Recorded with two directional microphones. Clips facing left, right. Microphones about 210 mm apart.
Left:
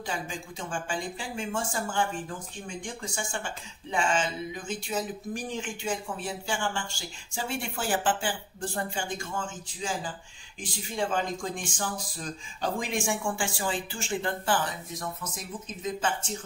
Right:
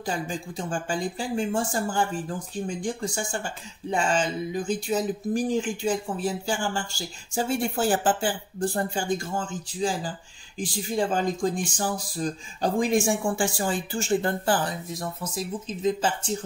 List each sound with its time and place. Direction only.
0.0 s speech: 40° right (ahead or behind)